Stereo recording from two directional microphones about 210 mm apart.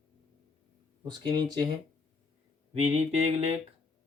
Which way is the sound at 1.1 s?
20° right (ahead or behind).